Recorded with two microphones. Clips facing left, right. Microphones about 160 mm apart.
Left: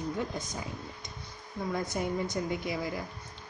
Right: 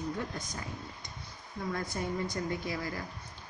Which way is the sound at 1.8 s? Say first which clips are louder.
Left 3 dB; 20° left (ahead or behind).